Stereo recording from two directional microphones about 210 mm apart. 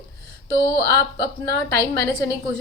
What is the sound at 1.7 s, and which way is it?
Speech, 20° left (ahead or behind).